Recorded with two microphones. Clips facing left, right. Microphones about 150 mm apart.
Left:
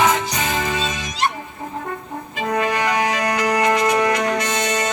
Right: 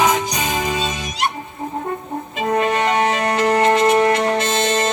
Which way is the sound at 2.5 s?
30° right (ahead or behind).